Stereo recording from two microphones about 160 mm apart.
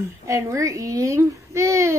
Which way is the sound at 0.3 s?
20° right (ahead or behind).